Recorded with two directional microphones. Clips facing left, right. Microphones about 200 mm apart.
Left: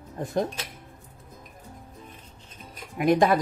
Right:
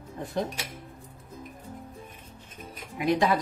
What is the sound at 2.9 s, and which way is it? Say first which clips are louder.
Speech: left 4 dB; 50° left (ahead or behind).